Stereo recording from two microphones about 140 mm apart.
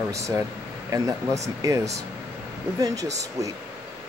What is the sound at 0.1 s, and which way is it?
Speech, 20° right (ahead or behind).